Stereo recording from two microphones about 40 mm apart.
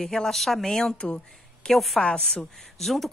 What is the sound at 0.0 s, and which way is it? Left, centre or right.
Speech, centre.